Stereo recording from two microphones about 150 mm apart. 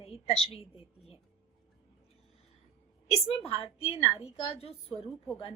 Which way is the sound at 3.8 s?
40° left (ahead or behind).